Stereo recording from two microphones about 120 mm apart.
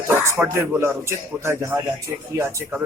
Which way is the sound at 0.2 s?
20° right (ahead or behind).